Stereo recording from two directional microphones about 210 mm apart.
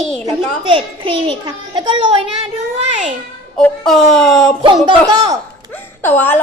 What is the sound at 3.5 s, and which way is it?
Speech, 5° left (ahead or behind).